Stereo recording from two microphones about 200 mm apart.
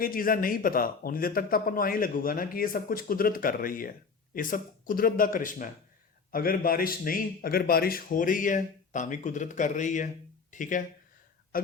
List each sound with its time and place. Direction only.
0.0 s speech: 45° left (ahead or behind)